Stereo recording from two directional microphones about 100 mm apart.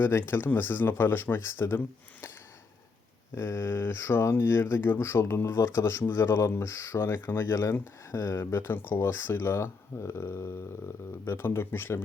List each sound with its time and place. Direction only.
0.0 s speech: 25° left (ahead or behind)
3.3 s speech: 25° left (ahead or behind)